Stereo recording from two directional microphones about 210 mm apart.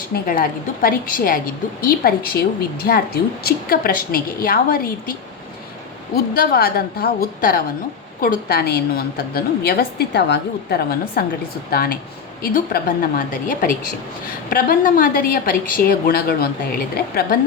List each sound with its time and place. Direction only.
0.1 s a woman's voice: 45° left (ahead or behind)
6.1 s a woman's voice: 45° left (ahead or behind)